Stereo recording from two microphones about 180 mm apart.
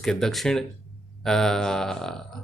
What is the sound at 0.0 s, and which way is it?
A man's voice, centre (ahead or behind).